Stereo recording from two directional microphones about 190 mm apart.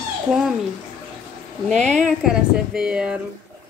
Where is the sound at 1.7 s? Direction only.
40° right (ahead or behind).